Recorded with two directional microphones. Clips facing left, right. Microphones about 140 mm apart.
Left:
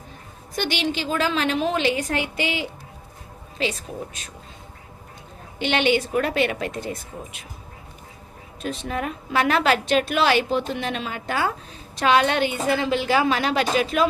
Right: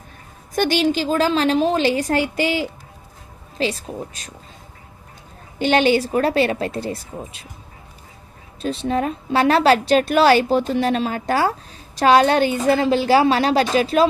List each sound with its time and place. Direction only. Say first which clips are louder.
0.5 s a woman's voice: right 7 dB; 45° right (ahead or behind)
5.5 s a woman's voice: right 5 dB; 40° right (ahead or behind)
8.6 s a woman's voice: right 6 dB; 30° right (ahead or behind)